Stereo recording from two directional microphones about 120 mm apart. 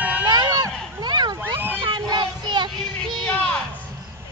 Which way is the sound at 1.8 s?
40° right (ahead or behind).